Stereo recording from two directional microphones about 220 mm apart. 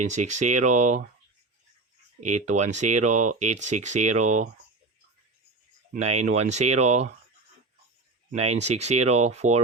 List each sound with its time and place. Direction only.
0.1 s speech: 35° right (ahead or behind)
2.3 s speech: 30° right (ahead or behind)
5.9 s speech: 30° right (ahead or behind)
8.4 s speech: 30° right (ahead or behind)